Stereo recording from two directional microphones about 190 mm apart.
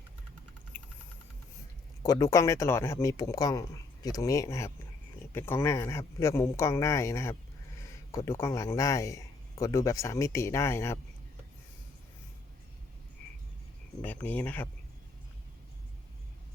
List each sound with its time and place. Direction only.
0.7 s a sound: 10° left (ahead or behind)
2.0 s speech: 20° left (ahead or behind)
14.0 s speech: 10° left (ahead or behind)